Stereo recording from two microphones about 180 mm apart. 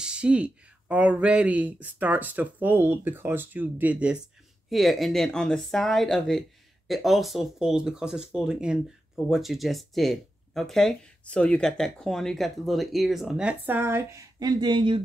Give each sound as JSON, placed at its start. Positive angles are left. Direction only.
{"t": 0.0, "sound": "speech", "side_deg": -5}